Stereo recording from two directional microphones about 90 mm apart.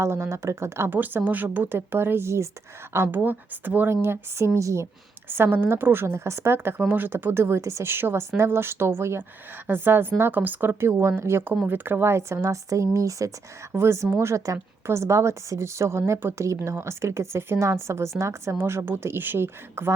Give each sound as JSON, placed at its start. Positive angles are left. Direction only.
{"t": 0.0, "sound": "a woman's voice", "side_deg": -30}